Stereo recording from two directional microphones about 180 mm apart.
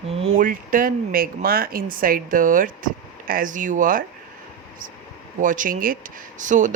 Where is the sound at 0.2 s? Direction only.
35° right (ahead or behind).